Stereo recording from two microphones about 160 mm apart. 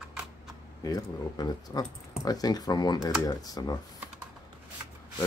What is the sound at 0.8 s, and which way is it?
Speech, 25° left (ahead or behind).